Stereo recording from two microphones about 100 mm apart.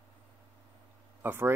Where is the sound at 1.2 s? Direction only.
20° right (ahead or behind).